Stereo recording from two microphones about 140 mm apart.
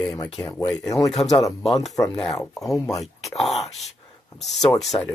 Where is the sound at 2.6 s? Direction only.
25° left (ahead or behind).